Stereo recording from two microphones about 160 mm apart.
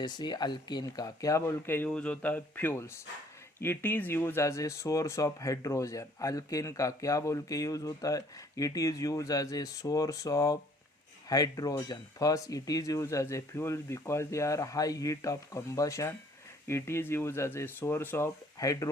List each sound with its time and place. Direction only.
0.0 s speech: 25° left (ahead or behind)